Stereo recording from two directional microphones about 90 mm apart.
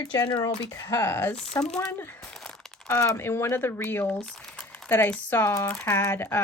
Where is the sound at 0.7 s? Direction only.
30° left (ahead or behind).